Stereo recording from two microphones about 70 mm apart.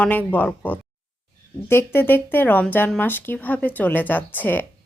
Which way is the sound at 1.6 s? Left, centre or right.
Left.